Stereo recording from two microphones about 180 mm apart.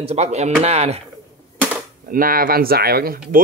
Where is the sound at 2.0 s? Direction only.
50° right (ahead or behind).